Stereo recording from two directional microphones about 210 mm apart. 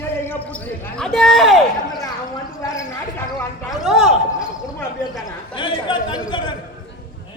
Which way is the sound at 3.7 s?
Centre (ahead or behind).